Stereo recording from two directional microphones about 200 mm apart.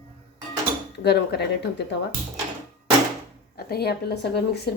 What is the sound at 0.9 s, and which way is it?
Speech, 55° left (ahead or behind).